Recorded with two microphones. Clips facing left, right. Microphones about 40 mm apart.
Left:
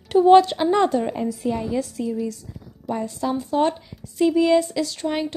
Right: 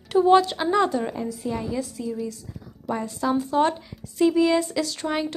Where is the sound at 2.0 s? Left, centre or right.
Left.